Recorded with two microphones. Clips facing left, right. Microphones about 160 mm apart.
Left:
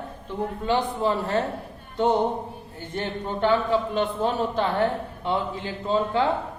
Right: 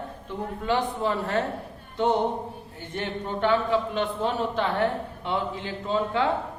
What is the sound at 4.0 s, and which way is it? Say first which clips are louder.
Speech: left 2 dB; 35° left (ahead or behind).